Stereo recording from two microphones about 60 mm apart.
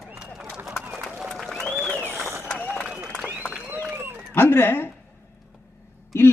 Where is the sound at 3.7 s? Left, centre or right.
Right.